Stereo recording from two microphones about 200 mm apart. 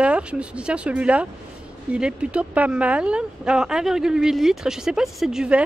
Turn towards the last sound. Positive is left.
turn(degrees=-5)  # may be behind; listen again after turning